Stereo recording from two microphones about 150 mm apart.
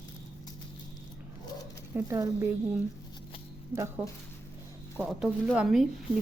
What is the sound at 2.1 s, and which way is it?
Speech, 20° right (ahead or behind).